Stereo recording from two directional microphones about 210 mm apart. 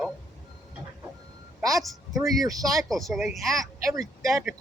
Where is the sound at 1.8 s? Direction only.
Centre (ahead or behind).